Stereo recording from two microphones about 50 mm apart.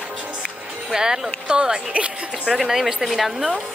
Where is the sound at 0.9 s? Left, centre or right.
Centre.